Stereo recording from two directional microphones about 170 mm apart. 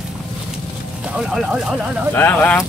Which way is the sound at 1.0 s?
5° right (ahead or behind).